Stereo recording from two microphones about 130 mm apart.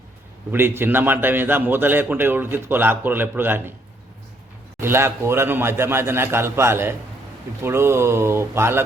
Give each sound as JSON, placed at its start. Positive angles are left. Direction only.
{"t": 0.5, "sound": "a man's voice", "side_deg": -15}
{"t": 4.8, "sound": "a man's voice", "side_deg": -20}